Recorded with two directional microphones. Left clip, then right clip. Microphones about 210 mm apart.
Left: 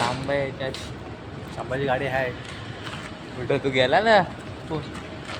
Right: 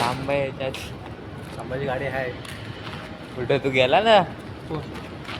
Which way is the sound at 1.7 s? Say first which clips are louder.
Left 2 dB; 30° left (ahead or behind).